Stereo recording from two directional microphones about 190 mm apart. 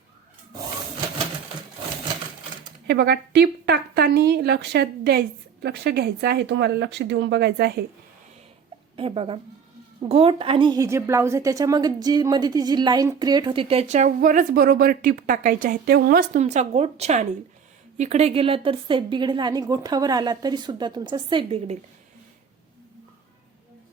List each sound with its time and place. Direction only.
2.8 s speech: 65° right (ahead or behind)
9.0 s a woman's voice: 30° right (ahead or behind); by 16.4 s 50° right (ahead or behind)
16.4 s a woman's voice: 35° right (ahead or behind)